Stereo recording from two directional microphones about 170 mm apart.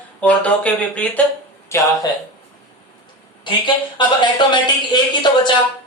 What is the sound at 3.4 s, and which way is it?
Speech, 25° left (ahead or behind).